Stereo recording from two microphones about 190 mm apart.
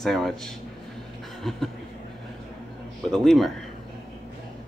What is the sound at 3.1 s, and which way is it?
Speech, centre (ahead or behind).